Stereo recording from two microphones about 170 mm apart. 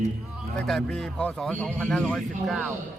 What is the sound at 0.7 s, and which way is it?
Speech, 5° left (ahead or behind).